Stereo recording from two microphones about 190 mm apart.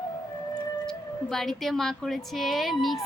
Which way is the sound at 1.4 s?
Centre (ahead or behind).